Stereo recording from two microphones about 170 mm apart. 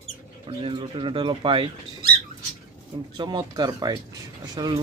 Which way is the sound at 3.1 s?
25° right (ahead or behind).